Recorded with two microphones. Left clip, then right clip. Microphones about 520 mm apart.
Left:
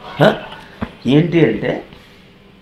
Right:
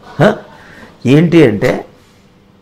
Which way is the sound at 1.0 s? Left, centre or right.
Right.